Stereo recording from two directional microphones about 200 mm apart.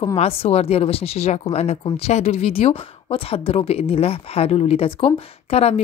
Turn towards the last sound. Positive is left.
turn(degrees=30)  # may be behind; listen again after turning